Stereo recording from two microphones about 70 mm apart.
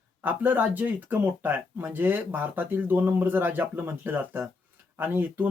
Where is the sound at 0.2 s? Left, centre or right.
Right.